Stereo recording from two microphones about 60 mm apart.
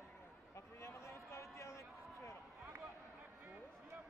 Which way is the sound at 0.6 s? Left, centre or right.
Left.